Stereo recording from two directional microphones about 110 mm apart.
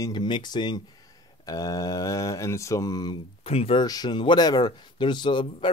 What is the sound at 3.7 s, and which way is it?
Speech, 40° left (ahead or behind).